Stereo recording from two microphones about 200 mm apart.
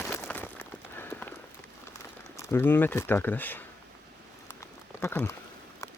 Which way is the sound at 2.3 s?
15° left (ahead or behind).